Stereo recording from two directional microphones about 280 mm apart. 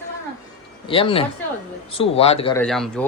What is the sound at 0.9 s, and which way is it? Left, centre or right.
A man's voice, centre.